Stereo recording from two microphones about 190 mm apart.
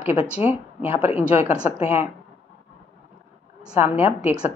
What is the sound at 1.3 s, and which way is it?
Speech, 35° left (ahead or behind).